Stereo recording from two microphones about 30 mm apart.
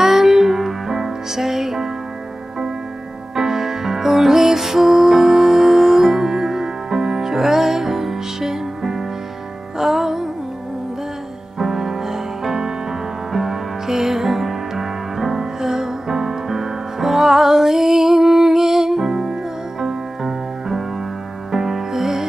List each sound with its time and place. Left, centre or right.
0.0 s music: centre
3.3 s music: centre
11.5 s music: centre